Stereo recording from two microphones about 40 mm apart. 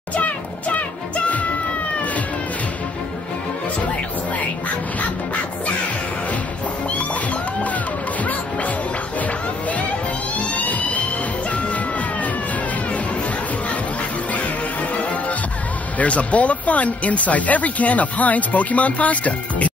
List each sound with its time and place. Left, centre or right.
0.1 s music: left
8.2 s music: left
10.3 s music: left
14.3 s music: left
16.0 s speech: left